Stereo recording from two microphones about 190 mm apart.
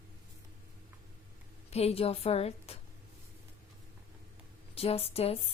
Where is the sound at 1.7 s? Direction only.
30° left (ahead or behind).